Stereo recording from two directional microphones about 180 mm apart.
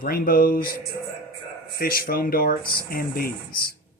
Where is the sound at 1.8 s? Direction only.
55° left (ahead or behind).